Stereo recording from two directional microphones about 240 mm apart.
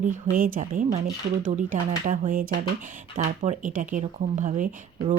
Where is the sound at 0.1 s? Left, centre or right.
Right.